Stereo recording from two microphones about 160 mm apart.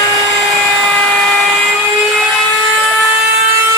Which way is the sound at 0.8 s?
Centre (ahead or behind).